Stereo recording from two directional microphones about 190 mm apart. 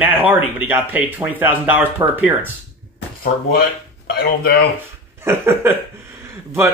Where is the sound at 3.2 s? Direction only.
50° left (ahead or behind).